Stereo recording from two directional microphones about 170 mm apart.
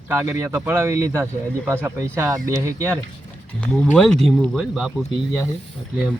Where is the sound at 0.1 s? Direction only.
15° right (ahead or behind).